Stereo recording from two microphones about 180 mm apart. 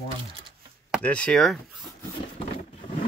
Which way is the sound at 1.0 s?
5° left (ahead or behind).